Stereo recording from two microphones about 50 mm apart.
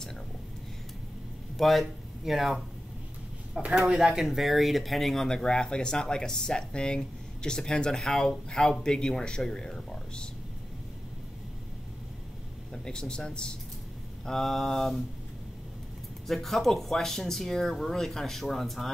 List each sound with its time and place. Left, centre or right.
1.6 s speech: centre
3.7 s speech: centre
12.7 s speech: centre
16.3 s speech: centre